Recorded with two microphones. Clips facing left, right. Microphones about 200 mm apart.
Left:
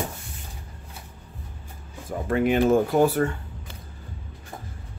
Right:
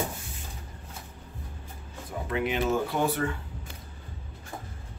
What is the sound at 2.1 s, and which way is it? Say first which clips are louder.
Speech: left 7 dB; 50° left (ahead or behind).